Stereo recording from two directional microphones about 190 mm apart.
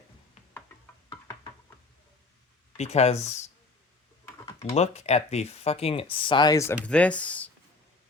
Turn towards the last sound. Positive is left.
turn(degrees=5)  # may be behind; listen again after turning